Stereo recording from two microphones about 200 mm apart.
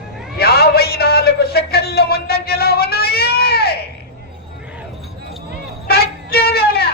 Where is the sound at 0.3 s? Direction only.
50° left (ahead or behind).